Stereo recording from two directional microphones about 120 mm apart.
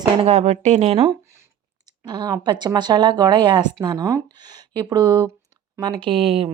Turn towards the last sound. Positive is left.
turn(degrees=-50)  # may be behind; listen again after turning